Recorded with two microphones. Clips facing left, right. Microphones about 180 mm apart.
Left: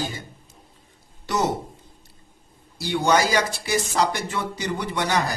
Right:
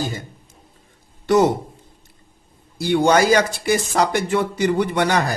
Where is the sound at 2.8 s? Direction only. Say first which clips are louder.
Right 5 dB; 55° right (ahead or behind).